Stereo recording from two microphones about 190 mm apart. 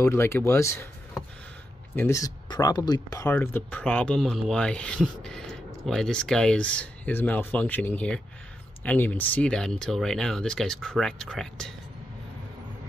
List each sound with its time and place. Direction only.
0.0 s speech: 15° left (ahead or behind)